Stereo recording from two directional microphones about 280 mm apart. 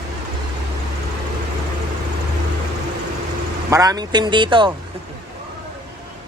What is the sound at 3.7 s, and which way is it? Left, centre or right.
Speech, centre.